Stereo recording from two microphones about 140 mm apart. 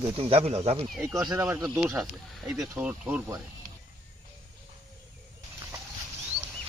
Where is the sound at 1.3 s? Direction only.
20° right (ahead or behind).